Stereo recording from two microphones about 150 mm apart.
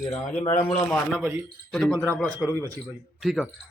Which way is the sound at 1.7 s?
Centre (ahead or behind).